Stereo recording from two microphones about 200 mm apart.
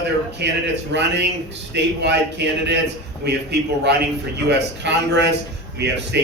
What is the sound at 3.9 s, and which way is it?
A man's voice, 55° right (ahead or behind).